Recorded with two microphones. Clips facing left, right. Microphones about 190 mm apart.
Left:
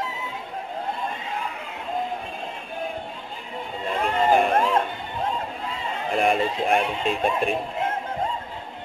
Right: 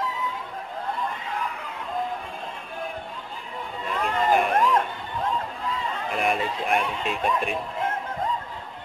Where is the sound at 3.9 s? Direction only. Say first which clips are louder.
Left 2 dB; 25° left (ahead or behind).